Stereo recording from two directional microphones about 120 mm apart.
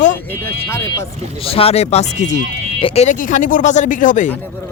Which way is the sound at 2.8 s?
55° left (ahead or behind).